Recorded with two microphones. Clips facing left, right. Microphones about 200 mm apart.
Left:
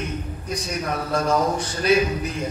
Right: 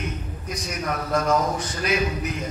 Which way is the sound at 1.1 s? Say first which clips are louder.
Left 1 dB; 30° left (ahead or behind).